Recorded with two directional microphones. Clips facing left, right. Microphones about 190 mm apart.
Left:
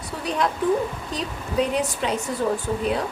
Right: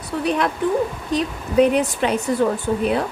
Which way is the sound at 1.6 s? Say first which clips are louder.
Right 7 dB; 65° right (ahead or behind).